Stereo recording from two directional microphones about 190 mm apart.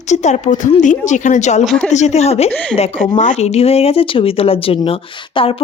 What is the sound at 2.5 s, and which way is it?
Speech, 5° left (ahead or behind).